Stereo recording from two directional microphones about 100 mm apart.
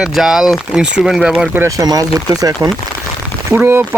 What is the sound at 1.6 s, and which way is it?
Speech, 35° right (ahead or behind).